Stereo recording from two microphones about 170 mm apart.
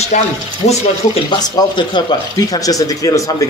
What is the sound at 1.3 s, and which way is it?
Speech, 25° left (ahead or behind).